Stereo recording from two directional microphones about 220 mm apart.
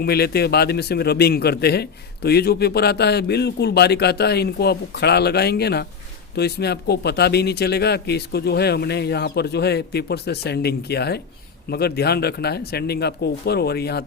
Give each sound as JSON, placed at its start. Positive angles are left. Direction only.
{"t": 0.0, "sound": "a man's voice", "side_deg": 45}